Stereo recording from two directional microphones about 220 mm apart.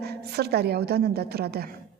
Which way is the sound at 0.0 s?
45° right (ahead or behind).